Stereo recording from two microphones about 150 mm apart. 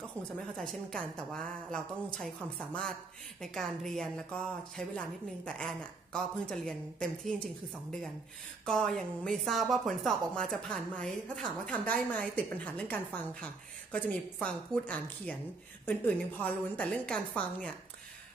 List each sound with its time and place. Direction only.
0.6 s a woman's voice: 5° left (ahead or behind)
3.3 s a woman's voice: centre (ahead or behind)
8.6 s a woman's voice: 5° left (ahead or behind)